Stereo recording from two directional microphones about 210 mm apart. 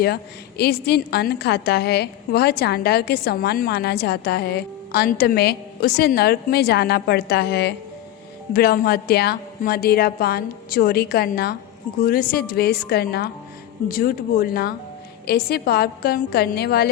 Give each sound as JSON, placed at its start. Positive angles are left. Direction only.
{"t": 0.0, "sound": "a woman's voice", "side_deg": 50}